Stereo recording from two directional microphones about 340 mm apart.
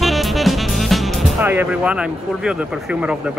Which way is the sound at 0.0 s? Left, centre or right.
Centre.